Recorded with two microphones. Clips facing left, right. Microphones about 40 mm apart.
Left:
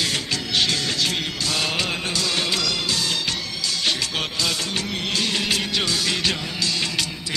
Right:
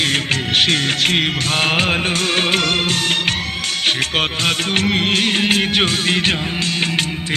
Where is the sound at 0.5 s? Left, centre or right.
Right.